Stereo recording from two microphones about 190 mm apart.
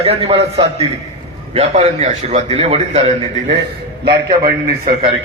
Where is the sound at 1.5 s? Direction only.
35° right (ahead or behind).